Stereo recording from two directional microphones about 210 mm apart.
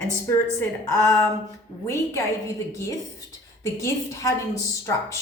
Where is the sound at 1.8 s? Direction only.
15° left (ahead or behind).